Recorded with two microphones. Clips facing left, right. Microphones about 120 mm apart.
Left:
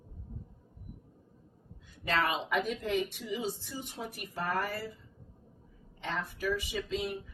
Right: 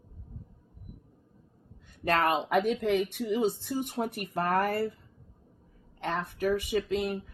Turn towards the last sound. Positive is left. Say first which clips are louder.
# right 6 dB
turn(degrees=-60)  # may be behind; listen again after turning